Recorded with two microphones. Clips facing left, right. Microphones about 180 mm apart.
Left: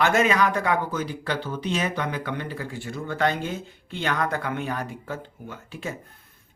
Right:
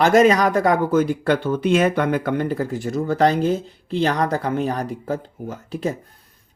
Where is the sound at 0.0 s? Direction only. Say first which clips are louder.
Right 7 dB; 40° right (ahead or behind).